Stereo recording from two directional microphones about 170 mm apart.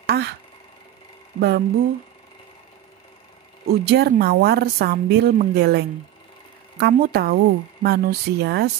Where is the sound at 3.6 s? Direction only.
70° right (ahead or behind).